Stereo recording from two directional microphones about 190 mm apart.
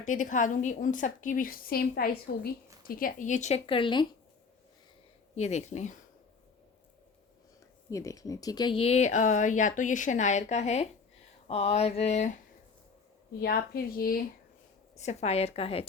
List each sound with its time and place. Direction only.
0.0 s a woman's voice: 40° left (ahead or behind); by 4.0 s 25° left (ahead or behind)
5.3 s speech: 35° left (ahead or behind)
7.9 s speech: 15° left (ahead or behind); by 12.3 s 35° left (ahead or behind)
13.4 s a woman's voice: 50° left (ahead or behind)
14.9 s speech: 35° left (ahead or behind)